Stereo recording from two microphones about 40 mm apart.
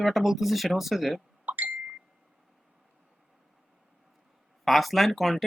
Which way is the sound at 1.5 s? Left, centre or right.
Right.